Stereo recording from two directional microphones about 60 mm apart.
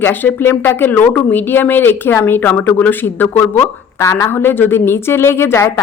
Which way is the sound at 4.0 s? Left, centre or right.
Left.